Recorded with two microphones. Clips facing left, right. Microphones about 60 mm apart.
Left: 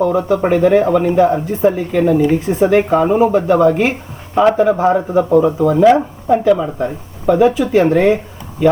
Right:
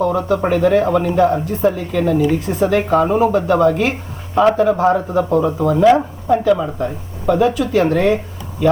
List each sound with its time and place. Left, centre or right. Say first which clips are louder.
0.0 s speech: left 2 dB; centre
5.4 s speech: left 4 dB; centre
5.6 s speech: left 2 dB; left